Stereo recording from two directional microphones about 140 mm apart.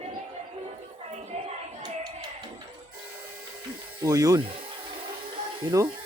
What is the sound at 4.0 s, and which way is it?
Speech, 25° right (ahead or behind).